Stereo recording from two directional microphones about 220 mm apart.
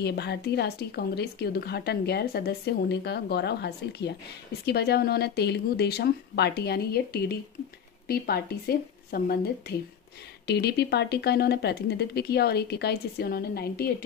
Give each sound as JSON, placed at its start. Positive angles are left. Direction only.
{"t": 0.0, "sound": "speech", "side_deg": 50}